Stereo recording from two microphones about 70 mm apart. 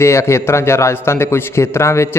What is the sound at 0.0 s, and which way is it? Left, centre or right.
A man's voice, left.